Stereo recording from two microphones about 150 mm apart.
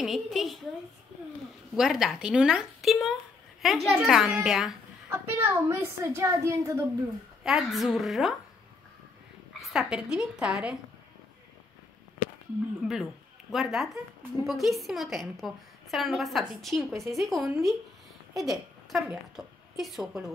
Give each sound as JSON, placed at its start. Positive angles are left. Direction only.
{"t": 0.0, "sound": "a woman's voice", "side_deg": 0}
{"t": 1.8, "sound": "a woman's voice", "side_deg": -5}
{"t": 5.1, "sound": "speech", "side_deg": -15}
{"t": 7.4, "sound": "a woman's voice", "side_deg": 0}
{"t": 9.6, "sound": "a woman's voice", "side_deg": 0}
{"t": 12.8, "sound": "a woman's voice", "side_deg": 0}